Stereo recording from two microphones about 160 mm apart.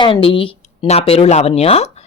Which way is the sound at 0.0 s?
35° left (ahead or behind).